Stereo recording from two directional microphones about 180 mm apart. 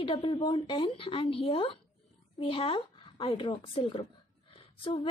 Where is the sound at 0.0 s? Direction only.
30° left (ahead or behind).